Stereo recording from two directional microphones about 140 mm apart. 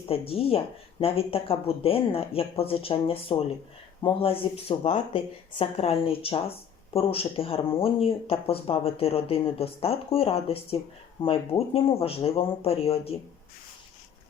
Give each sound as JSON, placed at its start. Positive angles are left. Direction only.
{"t": 0.1, "sound": "speech", "side_deg": 45}